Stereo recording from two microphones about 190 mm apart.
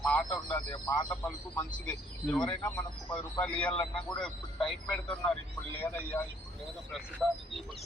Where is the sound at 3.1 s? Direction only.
5° left (ahead or behind).